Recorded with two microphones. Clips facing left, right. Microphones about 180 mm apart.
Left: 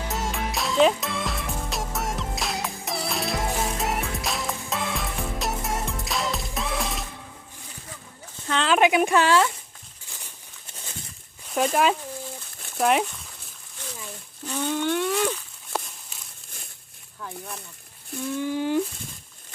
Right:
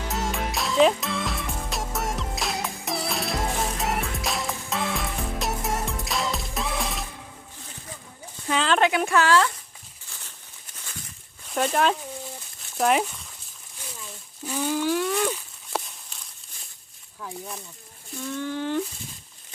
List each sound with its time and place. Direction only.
0.1 s music: centre (ahead or behind)
8.4 s a sound: 5° right (ahead or behind)
8.7 s speech: 15° left (ahead or behind)
10.1 s crumpling: 15° left (ahead or behind)
11.5 s speech: 5° left (ahead or behind)
14.4 s a sound: 5° right (ahead or behind)
17.2 s speech: 10° right (ahead or behind)
18.3 s speech: 10° left (ahead or behind)